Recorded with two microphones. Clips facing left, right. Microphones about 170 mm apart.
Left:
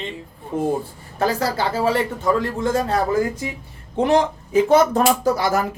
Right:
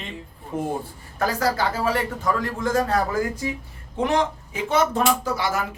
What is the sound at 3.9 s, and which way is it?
Speech, 35° left (ahead or behind).